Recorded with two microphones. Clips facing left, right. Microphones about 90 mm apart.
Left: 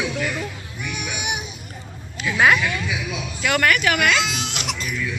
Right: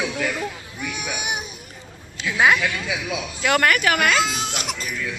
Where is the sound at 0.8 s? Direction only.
35° right (ahead or behind).